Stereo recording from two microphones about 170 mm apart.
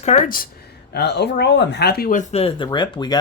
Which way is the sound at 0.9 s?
80° left.